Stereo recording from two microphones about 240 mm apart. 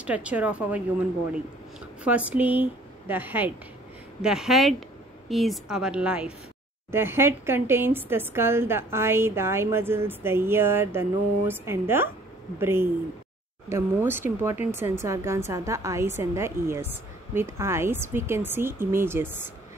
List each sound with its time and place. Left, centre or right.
0.0 s a woman's voice: centre